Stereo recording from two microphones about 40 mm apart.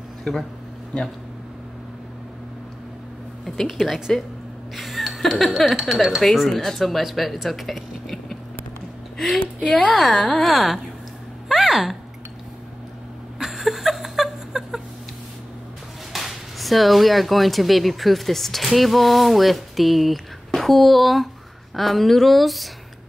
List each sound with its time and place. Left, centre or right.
0.2 s speech: centre
0.9 s speech: left
3.8 s speech: centre
4.7 s a sound: centre
5.6 s speech: centre
9.7 s speech: left
9.9 s speech: centre
11.4 s a sound: centre
13.4 s a sound: centre
16.1 s speech: centre